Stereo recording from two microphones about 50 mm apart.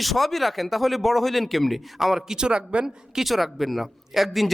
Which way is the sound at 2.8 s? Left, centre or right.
Centre.